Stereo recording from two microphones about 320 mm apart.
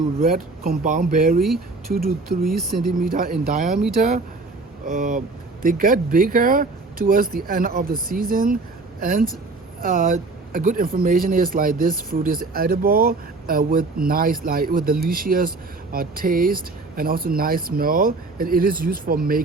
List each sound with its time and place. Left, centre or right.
0.2 s speech: right
4.9 s speech: right